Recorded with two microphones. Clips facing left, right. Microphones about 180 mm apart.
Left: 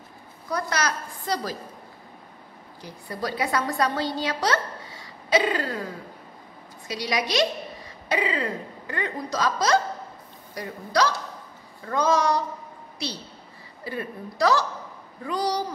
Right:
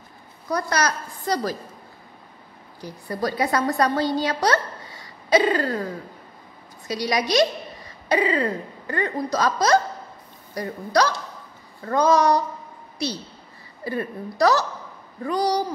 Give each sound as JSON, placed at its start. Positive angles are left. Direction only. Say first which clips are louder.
{"t": 0.5, "sound": "a woman's voice", "louder": "right 3 dB", "side_deg": -40}
{"t": 2.8, "sound": "a woman's voice", "louder": "right 5 dB", "side_deg": -40}
{"t": 6.9, "sound": "a woman's voice", "louder": "right 4 dB", "side_deg": -40}
{"t": 13.8, "sound": "a woman's voice", "louder": "right 5 dB", "side_deg": -45}